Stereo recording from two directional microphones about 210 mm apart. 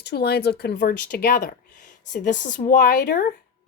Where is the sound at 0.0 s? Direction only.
50° left (ahead or behind).